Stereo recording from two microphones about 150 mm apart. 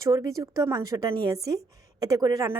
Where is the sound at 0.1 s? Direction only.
20° right (ahead or behind).